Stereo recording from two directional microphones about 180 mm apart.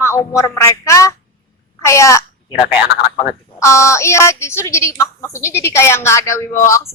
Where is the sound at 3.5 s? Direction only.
15° left (ahead or behind).